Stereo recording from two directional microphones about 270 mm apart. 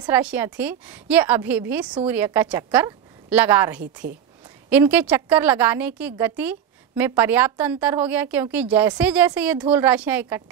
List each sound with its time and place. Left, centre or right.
0.0 s a woman's voice: centre
4.0 s speech: right
4.6 s a woman's voice: centre